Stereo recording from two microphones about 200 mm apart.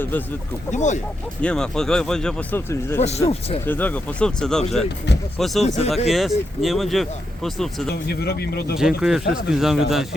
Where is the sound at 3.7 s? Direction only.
10° left (ahead or behind).